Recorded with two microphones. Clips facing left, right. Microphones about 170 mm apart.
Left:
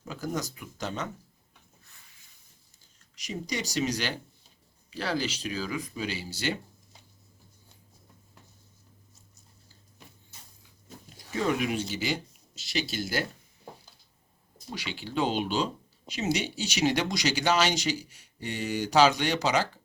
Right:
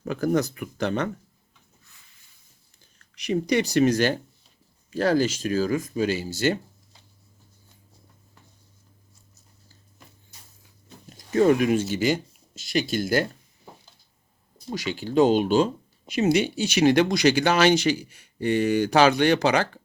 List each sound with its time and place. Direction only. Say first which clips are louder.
0.0 s speech: right 10 dB; 60° right (ahead or behind)
3.2 s speech: right 11 dB; 60° right (ahead or behind)
11.3 s speech: right 9 dB; 45° right (ahead or behind)
14.7 s speech: right 9 dB; 45° right (ahead or behind); by 19.8 s 60° right (ahead or behind)